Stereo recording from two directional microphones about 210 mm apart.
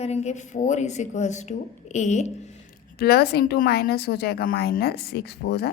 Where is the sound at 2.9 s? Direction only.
50° left (ahead or behind).